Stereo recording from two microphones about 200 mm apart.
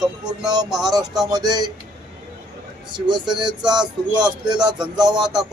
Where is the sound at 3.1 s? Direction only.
20° right (ahead or behind).